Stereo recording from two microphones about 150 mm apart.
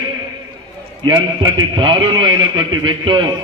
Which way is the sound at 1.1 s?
30° right (ahead or behind).